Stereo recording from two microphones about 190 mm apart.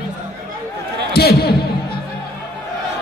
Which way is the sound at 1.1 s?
55° left (ahead or behind).